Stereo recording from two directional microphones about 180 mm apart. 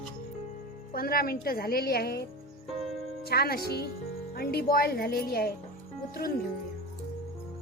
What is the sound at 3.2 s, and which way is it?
A woman's voice, 60° left (ahead or behind).